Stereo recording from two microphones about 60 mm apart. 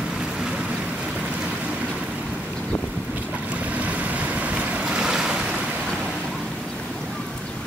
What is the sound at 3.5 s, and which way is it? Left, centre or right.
Waves, right.